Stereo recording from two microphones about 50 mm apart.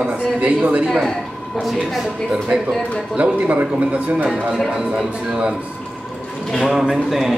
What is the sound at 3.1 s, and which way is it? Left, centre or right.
A man's voice, right.